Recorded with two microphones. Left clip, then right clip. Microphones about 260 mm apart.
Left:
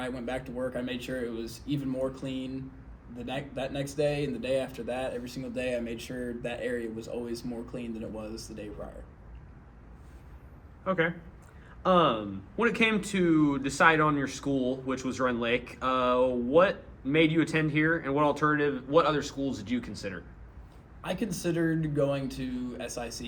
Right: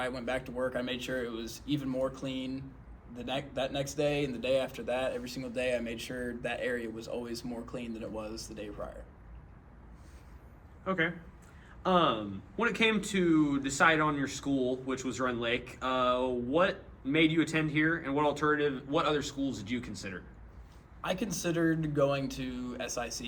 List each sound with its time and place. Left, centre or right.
0.0 s speech: centre
10.8 s a man's voice: left
21.0 s speech: centre